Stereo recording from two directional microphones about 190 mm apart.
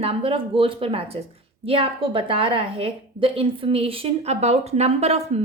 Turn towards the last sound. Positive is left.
turn(degrees=-35)  # may be behind; listen again after turning